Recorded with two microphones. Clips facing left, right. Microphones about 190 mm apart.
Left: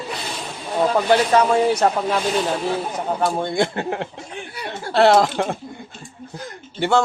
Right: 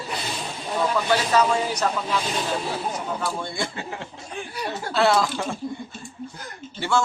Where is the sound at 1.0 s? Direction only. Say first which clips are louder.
Left 5 dB; 55° left (ahead or behind).